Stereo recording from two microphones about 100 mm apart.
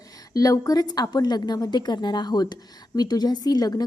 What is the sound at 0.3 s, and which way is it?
Speech, 35° left (ahead or behind).